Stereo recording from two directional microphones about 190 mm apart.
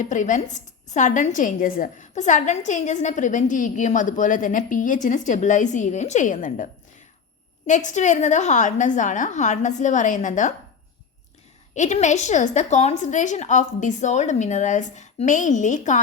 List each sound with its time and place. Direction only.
0.0 s a woman's voice: 40° left (ahead or behind)
7.7 s a woman's voice: 40° left (ahead or behind)
11.7 s a woman's voice: 40° left (ahead or behind)